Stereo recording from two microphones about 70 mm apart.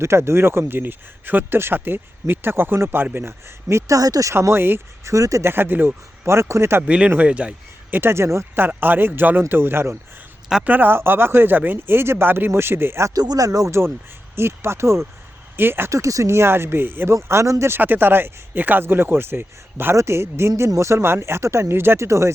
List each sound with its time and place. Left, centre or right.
0.0 s speech: right
4.4 s speech: right
5.0 s speech: right
5.5 s speech: right
6.2 s speech: right
6.8 s speech: centre; by 8.6 s right
8.6 s speech: right
13.1 s speech: right
14.3 s speech: right
15.9 s speech: right
17.2 s speech: right
17.7 s speech: right